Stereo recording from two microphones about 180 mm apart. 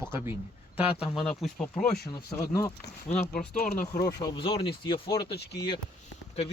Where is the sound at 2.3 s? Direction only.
20° left (ahead or behind).